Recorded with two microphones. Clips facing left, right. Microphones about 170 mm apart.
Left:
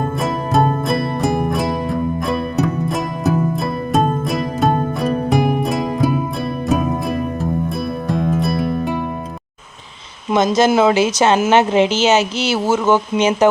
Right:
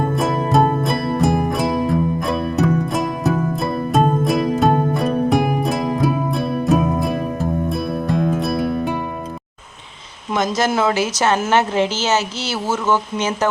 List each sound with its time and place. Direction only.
0.2 s music: centre (ahead or behind)
10.3 s a woman's voice: 20° left (ahead or behind)